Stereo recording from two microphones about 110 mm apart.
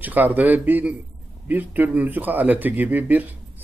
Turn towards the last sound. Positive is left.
turn(degrees=-15)  # may be behind; listen again after turning